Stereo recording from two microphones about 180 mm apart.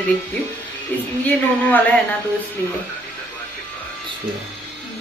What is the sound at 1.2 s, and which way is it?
Speech, 10° left (ahead or behind).